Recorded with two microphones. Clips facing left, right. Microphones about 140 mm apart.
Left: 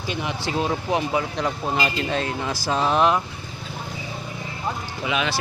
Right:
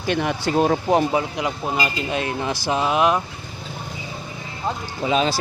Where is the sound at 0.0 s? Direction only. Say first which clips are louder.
Right 6 dB; 60° right (ahead or behind).